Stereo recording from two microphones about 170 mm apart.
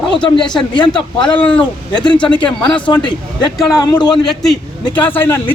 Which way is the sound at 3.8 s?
25° left (ahead or behind).